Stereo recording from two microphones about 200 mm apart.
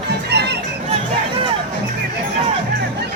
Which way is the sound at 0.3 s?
55° right (ahead or behind).